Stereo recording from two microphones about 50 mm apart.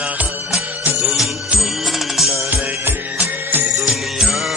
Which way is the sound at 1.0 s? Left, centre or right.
Centre.